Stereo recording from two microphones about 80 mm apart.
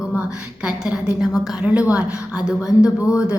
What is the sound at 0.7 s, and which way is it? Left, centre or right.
A woman's voice, centre.